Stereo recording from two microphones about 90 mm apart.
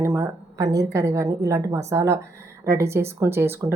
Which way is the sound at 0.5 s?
45° right (ahead or behind).